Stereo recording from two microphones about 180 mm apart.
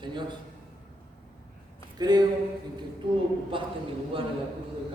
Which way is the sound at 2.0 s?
20° right (ahead or behind).